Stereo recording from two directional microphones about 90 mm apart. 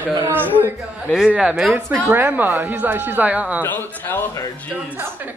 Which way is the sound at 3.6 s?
20° left (ahead or behind).